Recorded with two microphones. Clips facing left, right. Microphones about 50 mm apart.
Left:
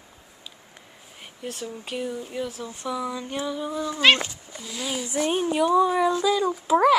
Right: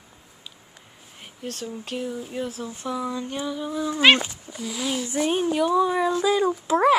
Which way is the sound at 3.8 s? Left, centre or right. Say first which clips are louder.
Right 2 dB; centre.